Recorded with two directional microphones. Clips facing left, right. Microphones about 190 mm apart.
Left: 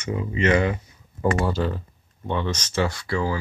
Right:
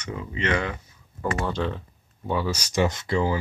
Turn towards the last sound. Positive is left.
turn(degrees=-20)  # may be behind; listen again after turning